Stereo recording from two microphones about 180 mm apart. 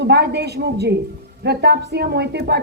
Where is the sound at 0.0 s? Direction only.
70° right (ahead or behind).